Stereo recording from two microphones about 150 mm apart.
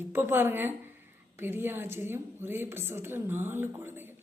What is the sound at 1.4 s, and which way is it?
Speech, 15° right (ahead or behind).